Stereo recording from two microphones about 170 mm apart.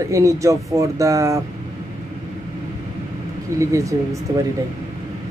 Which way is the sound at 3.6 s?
20° right (ahead or behind).